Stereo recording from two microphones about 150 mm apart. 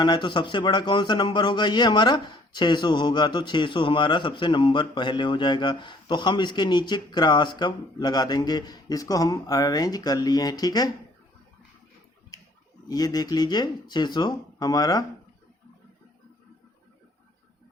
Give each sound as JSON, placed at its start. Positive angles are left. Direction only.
{"t": 0.0, "sound": "a man's voice", "side_deg": 30}
{"t": 12.9, "sound": "speech", "side_deg": 25}